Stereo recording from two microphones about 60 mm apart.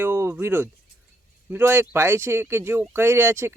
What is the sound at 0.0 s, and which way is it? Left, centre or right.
Speech, right.